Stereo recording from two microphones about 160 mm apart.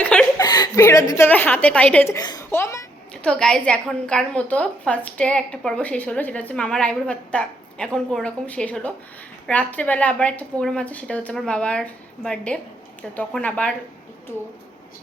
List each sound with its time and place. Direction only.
0.0 s chuckle: 10° left (ahead or behind)
0.3 s a woman's voice: 25° left (ahead or behind); by 2.1 s 10° left (ahead or behind)
2.1 s speech: 25° left (ahead or behind)
3.2 s a woman's voice: 5° left (ahead or behind)